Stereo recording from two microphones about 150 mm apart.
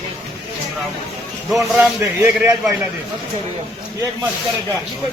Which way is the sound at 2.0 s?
15° right (ahead or behind).